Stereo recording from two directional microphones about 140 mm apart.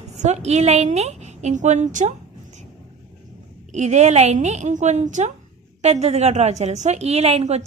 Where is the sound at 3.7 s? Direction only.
55° right (ahead or behind).